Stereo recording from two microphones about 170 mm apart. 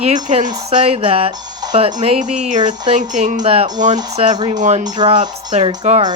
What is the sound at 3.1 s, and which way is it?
Speech, 45° right (ahead or behind).